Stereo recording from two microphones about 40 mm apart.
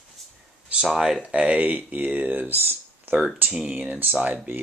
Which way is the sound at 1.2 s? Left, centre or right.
Right.